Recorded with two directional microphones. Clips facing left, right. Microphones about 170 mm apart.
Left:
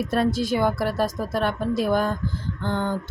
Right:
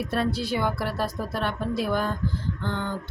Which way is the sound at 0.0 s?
45° left (ahead or behind).